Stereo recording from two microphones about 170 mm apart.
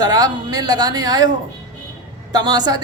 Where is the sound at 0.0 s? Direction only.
25° right (ahead or behind).